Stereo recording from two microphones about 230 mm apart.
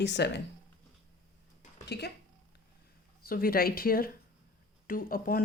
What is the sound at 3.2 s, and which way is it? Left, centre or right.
Speech, left.